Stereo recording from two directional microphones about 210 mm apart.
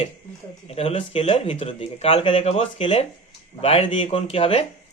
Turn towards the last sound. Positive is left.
turn(degrees=25)  # may be behind; listen again after turning